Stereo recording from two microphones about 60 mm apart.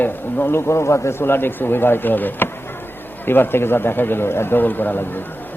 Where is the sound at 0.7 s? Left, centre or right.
Left.